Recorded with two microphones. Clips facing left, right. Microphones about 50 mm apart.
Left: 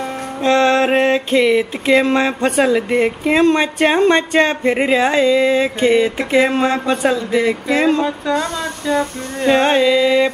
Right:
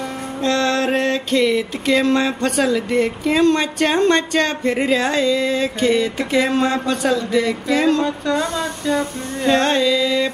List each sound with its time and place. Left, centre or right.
0.4 s music: left
8.4 s a sound: centre
9.5 s music: centre